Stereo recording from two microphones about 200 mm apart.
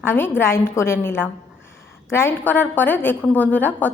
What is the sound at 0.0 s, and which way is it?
A woman's voice, 10° left (ahead or behind).